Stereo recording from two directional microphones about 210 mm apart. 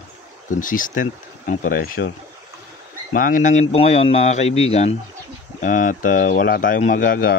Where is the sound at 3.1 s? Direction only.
40° left (ahead or behind).